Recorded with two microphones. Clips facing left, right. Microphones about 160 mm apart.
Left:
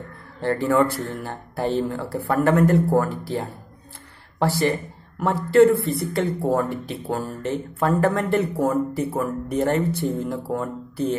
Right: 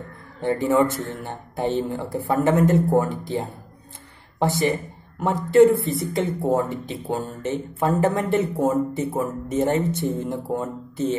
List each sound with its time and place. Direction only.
0.5 s speech: 15° right (ahead or behind)